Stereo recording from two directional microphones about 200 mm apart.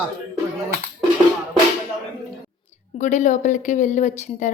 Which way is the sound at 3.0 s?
35° left (ahead or behind).